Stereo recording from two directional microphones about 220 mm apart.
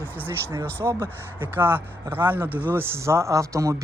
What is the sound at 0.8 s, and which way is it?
Speech, 10° right (ahead or behind).